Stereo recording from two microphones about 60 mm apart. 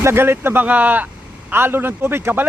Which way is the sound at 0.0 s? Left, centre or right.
Right.